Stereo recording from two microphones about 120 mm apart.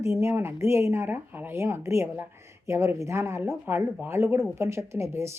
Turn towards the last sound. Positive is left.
turn(degrees=-20)  # may be behind; listen again after turning